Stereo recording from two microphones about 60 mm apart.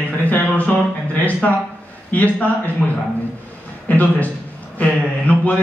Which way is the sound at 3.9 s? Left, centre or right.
Left.